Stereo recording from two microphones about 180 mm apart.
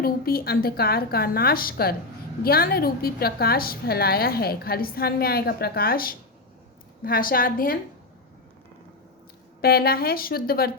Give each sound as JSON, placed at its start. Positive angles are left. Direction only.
{"t": 0.0, "sound": "a woman's voice", "side_deg": 55}
{"t": 9.6, "sound": "a woman's voice", "side_deg": 60}